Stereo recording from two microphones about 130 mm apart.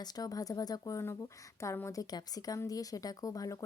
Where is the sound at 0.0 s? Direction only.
30° left (ahead or behind).